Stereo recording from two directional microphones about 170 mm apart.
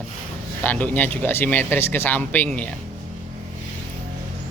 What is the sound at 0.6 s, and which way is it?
Speech, 10° left (ahead or behind).